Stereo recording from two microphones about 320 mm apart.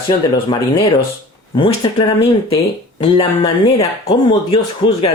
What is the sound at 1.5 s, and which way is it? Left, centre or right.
Speech, centre.